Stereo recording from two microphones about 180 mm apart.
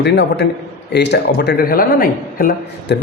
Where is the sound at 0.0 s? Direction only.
70° left (ahead or behind); by 2.5 s 55° left (ahead or behind).